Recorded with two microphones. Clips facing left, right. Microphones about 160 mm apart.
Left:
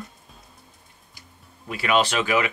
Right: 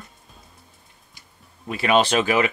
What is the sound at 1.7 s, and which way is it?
Speech, 25° right (ahead or behind).